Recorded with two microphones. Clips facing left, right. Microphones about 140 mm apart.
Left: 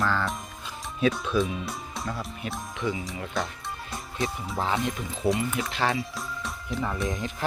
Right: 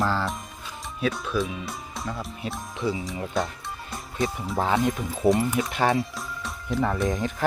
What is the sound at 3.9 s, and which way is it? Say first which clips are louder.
Music: right 3 dB; centre (ahead or behind).